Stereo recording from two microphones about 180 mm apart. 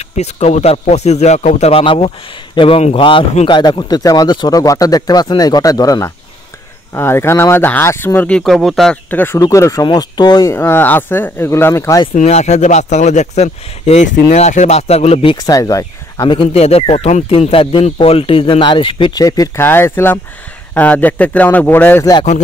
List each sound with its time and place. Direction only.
0.2 s speech: 40° left (ahead or behind); by 12.1 s 15° left (ahead or behind)
12.2 s a man's voice: 40° left (ahead or behind)
15.4 s speech: 20° left (ahead or behind)